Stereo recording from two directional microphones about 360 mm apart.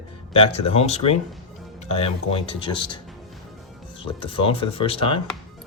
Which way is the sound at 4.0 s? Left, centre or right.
Centre.